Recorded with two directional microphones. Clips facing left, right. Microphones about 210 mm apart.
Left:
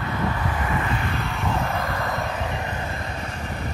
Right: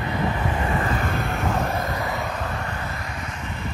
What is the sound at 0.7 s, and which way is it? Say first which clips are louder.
Vehicle: right 2 dB; 45° right (ahead or behind).